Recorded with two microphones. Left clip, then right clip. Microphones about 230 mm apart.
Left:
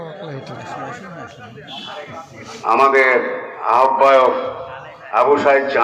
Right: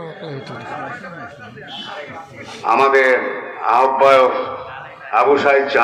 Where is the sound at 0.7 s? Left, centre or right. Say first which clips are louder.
Right 1 dB; right.